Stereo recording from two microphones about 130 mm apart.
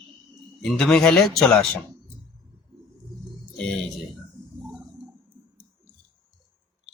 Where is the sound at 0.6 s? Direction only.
Centre (ahead or behind).